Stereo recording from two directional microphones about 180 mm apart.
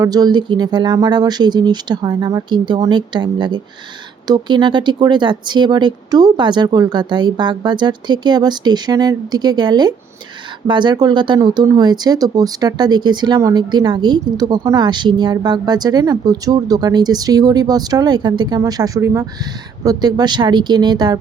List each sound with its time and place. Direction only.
0.0 s speech: 20° right (ahead or behind)